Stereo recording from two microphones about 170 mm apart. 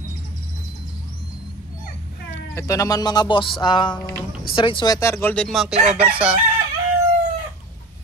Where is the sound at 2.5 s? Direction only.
20° left (ahead or behind).